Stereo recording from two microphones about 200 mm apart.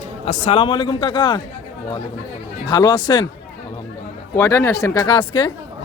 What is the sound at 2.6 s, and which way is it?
Speech, 20° left (ahead or behind).